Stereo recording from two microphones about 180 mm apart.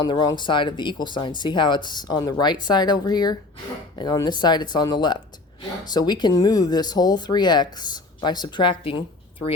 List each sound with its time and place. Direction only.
0.0 s speech: 25° left (ahead or behind)